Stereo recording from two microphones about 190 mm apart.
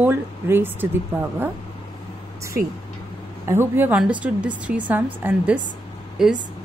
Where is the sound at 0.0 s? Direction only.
10° right (ahead or behind).